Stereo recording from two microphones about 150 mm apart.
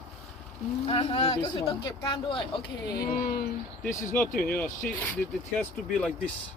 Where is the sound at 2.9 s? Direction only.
80° left.